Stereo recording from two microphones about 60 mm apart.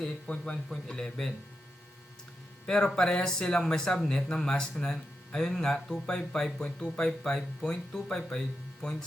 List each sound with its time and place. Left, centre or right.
0.3 s speech: centre
2.6 s speech: centre